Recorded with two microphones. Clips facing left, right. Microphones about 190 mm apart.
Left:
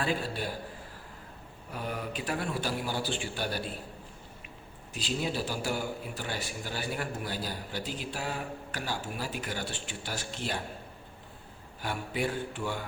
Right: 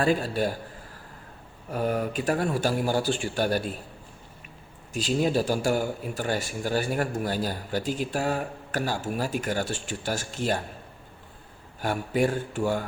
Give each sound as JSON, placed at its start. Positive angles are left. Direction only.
{"t": 0.0, "sound": "a man's voice", "side_deg": -45}
{"t": 1.7, "sound": "a man's voice", "side_deg": -45}
{"t": 4.9, "sound": "a man's voice", "side_deg": -45}
{"t": 11.8, "sound": "a man's voice", "side_deg": -45}